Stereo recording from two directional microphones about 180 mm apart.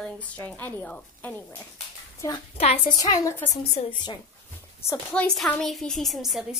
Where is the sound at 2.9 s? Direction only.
20° left (ahead or behind).